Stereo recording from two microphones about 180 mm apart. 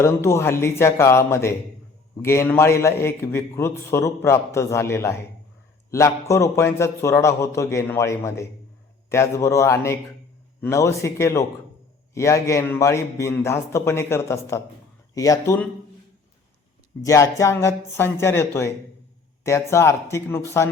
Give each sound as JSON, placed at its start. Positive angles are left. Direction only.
{"t": 0.0, "sound": "a man's voice", "side_deg": 15}
{"t": 17.0, "sound": "a man's voice", "side_deg": 15}